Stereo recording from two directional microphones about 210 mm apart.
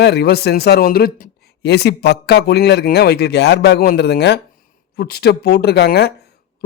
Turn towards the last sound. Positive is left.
turn(degrees=50)  # may be behind; listen again after turning